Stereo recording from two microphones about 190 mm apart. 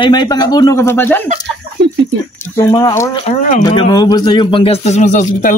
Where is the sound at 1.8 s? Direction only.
70° right (ahead or behind).